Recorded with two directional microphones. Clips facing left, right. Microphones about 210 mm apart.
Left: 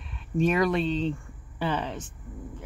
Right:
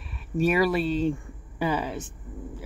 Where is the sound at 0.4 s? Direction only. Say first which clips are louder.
Right 1 dB; 5° right (ahead or behind).